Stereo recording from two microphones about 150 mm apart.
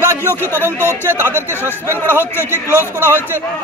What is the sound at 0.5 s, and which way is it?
Speech, 15° right (ahead or behind).